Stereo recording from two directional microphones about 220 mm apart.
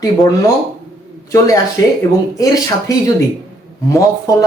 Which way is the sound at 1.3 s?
15° left (ahead or behind).